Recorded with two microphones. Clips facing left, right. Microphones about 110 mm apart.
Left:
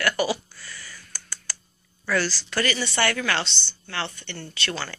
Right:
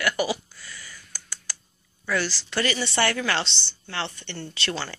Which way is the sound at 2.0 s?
20° right (ahead or behind).